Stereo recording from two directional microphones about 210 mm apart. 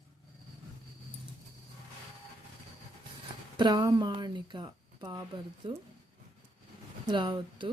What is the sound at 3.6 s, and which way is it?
Speech, 20° right (ahead or behind).